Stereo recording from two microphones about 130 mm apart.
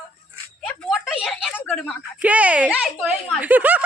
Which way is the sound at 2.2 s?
10° right (ahead or behind).